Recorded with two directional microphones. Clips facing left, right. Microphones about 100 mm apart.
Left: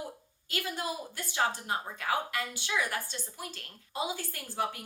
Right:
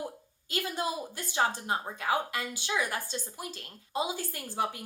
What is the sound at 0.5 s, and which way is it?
A woman's voice, 20° right (ahead or behind).